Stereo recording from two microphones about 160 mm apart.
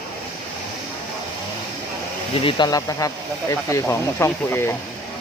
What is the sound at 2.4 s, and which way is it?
Speech, 25° left (ahead or behind).